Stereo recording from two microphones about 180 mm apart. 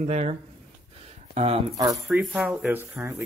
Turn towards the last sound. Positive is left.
turn(degrees=-10)  # may be behind; listen again after turning